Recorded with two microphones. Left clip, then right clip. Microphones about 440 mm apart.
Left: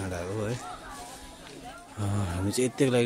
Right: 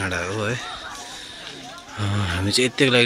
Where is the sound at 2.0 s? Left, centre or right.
Left.